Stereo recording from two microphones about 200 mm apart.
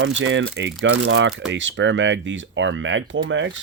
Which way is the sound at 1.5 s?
65° right (ahead or behind).